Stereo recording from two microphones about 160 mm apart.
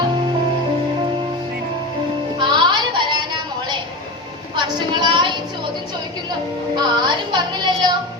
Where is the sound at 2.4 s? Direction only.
30° right (ahead or behind).